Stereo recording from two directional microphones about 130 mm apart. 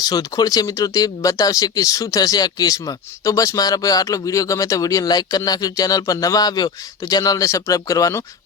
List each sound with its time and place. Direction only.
0.0 s speech: 30° left (ahead or behind)